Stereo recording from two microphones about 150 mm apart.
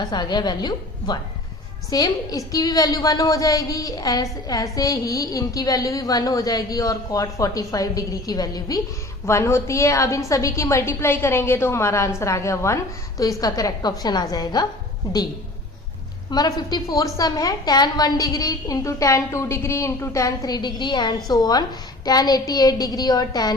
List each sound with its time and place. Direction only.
0.0 s a woman's voice: 30° left (ahead or behind)
16.3 s a woman's voice: 25° left (ahead or behind)